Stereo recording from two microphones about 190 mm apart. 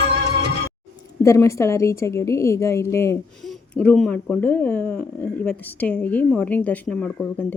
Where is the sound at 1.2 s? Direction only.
15° left (ahead or behind).